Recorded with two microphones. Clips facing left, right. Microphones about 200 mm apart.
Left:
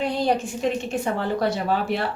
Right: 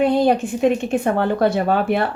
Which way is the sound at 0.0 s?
55° right (ahead or behind).